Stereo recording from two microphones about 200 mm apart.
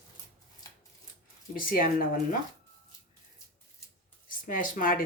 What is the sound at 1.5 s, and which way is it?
Speech, 45° left (ahead or behind).